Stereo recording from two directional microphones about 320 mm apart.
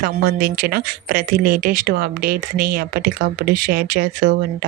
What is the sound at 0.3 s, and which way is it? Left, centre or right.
Speech, right.